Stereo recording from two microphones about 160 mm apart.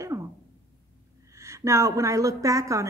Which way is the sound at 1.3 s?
20° right (ahead or behind).